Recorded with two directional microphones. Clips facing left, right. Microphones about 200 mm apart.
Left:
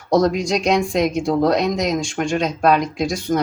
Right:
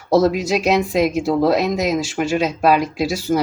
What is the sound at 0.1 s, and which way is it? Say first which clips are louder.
Speech: right 1 dB; 5° right (ahead or behind).